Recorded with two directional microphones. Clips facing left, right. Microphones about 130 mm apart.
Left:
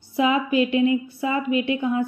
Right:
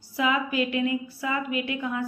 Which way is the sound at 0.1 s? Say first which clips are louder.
Left 5 dB; 25° left (ahead or behind).